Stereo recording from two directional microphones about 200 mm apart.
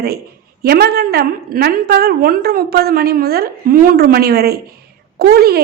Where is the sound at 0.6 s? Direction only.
50° right (ahead or behind).